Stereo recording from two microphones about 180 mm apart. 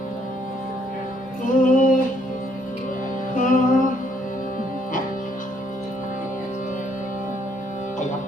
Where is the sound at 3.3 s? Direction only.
45° left (ahead or behind).